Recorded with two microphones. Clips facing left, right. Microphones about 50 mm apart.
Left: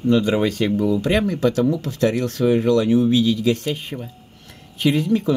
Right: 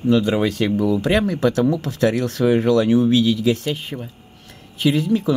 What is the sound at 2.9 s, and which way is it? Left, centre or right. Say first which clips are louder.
Speech: right 1 dB; centre.